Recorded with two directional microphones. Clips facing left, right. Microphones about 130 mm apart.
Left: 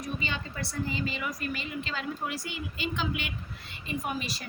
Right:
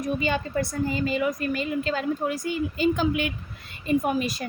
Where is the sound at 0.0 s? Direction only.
45° right (ahead or behind).